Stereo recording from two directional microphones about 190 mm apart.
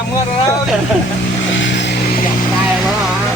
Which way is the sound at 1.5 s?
75° left (ahead or behind).